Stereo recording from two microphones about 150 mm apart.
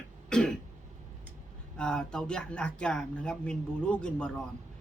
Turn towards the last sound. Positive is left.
turn(degrees=5)  # may be behind; listen again after turning